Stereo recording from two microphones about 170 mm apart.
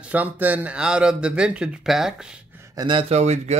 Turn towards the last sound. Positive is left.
turn(degrees=-40)  # may be behind; listen again after turning